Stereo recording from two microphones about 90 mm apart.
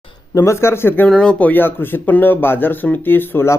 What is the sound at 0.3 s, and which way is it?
Speech, 30° left (ahead or behind).